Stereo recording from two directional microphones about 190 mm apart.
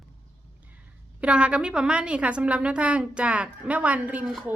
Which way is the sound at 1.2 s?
5° right (ahead or behind).